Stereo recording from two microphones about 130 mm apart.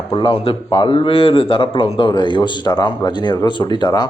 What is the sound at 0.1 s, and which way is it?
A man's voice, 35° left (ahead or behind).